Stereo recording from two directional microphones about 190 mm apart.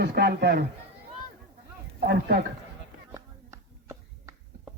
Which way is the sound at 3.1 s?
15° right (ahead or behind).